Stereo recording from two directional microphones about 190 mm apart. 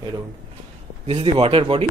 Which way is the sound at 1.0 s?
30° right (ahead or behind).